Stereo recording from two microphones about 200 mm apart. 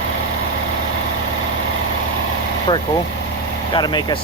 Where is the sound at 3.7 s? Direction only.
20° left (ahead or behind).